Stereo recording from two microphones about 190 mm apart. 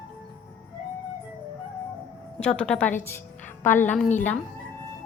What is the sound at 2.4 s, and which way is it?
A woman's voice, 5° left (ahead or behind).